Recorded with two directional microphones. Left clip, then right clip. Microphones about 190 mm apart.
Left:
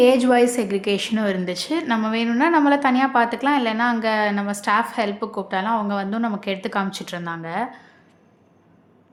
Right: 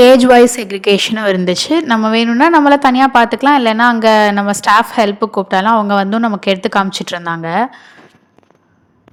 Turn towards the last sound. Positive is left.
turn(degrees=-40)  # may be behind; listen again after turning